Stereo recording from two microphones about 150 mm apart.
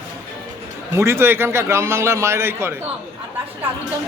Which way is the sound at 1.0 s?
15° right (ahead or behind).